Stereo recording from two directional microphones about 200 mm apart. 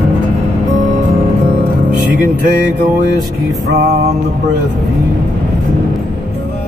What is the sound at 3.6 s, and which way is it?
Music, 55° right (ahead or behind).